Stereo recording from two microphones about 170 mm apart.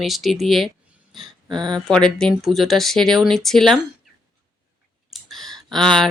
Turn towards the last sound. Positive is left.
turn(degrees=0)  # may be behind; listen again after turning